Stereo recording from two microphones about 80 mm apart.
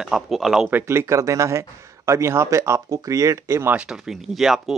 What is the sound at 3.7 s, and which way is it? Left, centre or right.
Speech, centre.